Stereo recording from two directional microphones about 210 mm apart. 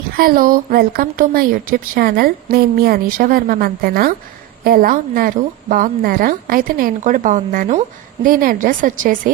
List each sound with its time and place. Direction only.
0.2 s a woman's voice: 45° right (ahead or behind)